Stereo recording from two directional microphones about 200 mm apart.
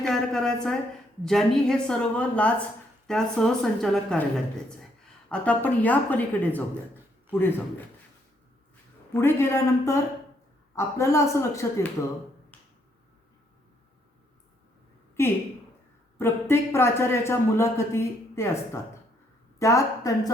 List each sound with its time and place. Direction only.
0.0 s a woman's voice: 5° left (ahead or behind)
9.1 s a man's voice: 10° left (ahead or behind)
16.1 s a man's voice: 10° left (ahead or behind)